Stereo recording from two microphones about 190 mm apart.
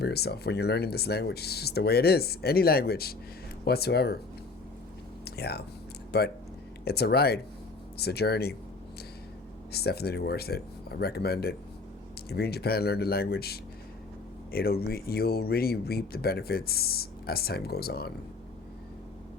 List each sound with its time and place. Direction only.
0.0 s speech: 55° left (ahead or behind)
5.2 s a sound: 55° left (ahead or behind)
6.1 s speech: 60° left (ahead or behind)
9.7 s speech: 55° left (ahead or behind)